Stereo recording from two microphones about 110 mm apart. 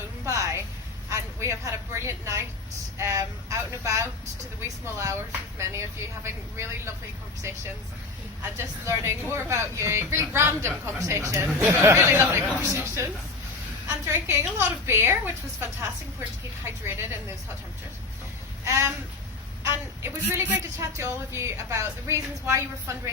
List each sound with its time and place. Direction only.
0.3 s a sound: 30° right (ahead or behind)
3.0 s a woman's voice: 25° right (ahead or behind)
16.6 s a woman's voice: 25° right (ahead or behind)
18.6 s speech: 30° right (ahead or behind)
20.0 s a woman's voice: 25° right (ahead or behind)